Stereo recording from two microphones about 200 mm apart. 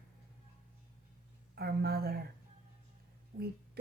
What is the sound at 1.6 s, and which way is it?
Speech, 50° right (ahead or behind).